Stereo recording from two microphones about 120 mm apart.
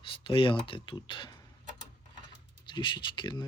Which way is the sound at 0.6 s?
45° left (ahead or behind).